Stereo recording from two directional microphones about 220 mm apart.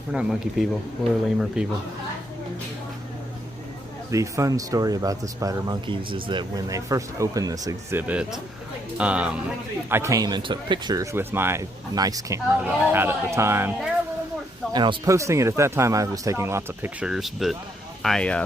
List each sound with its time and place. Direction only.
0.1 s speech: 5° right (ahead or behind)
4.1 s speech: 15° right (ahead or behind); by 18.4 s 5° left (ahead or behind)